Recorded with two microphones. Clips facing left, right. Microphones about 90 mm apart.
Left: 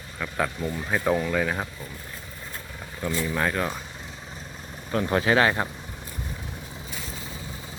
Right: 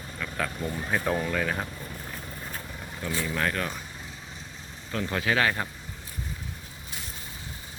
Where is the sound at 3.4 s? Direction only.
15° left (ahead or behind).